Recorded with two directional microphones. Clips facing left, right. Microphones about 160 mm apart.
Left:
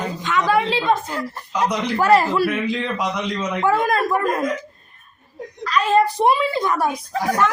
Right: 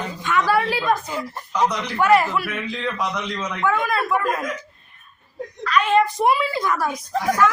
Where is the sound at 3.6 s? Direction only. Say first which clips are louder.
Left 3 dB; 30° left (ahead or behind).